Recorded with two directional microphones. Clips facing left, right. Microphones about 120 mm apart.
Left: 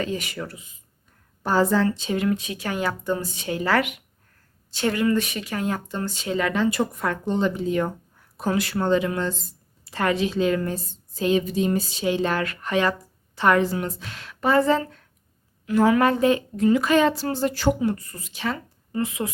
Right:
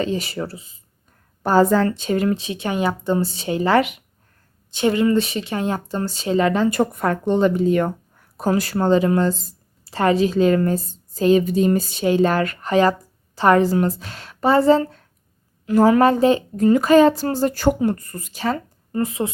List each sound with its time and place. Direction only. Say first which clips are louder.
0.0 s a woman's voice: right 5 dB; 30° right (ahead or behind)
1.4 s speech: right 5 dB; 50° right (ahead or behind)
2.2 s speech: right 3 dB; 30° right (ahead or behind)
6.7 s speech: right 5 dB; 50° right (ahead or behind)
8.4 s a woman's voice: right 4 dB; 40° right (ahead or behind)
16.6 s speech: right 7 dB; 40° right (ahead or behind)